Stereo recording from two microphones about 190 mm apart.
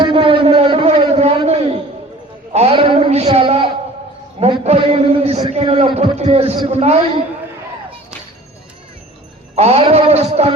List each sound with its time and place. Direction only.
0.0 s a sound: 25° right (ahead or behind)
5.5 s a man's voice: 30° right (ahead or behind)
9.6 s a man's voice: 30° right (ahead or behind)